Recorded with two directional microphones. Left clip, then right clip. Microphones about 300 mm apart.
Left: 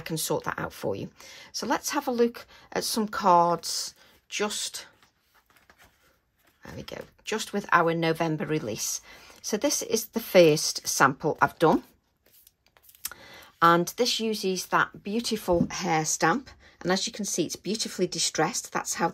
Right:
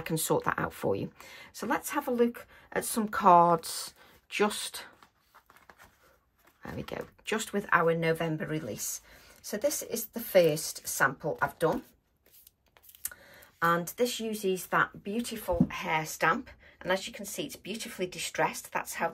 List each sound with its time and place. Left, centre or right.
0.0 s speech: centre
6.6 s speech: centre
13.0 s speech: centre